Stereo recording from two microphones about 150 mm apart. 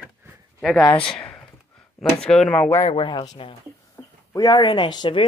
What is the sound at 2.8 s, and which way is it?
Speech, 35° left (ahead or behind).